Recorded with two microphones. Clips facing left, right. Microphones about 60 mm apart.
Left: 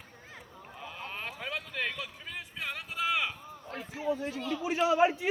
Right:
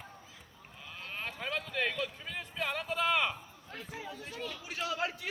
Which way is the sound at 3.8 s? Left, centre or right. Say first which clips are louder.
Left 10 dB; centre.